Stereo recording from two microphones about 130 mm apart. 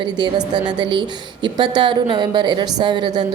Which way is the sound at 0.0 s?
35° right (ahead or behind).